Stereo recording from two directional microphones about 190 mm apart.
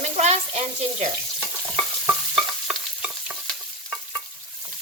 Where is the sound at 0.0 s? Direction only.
35° right (ahead or behind).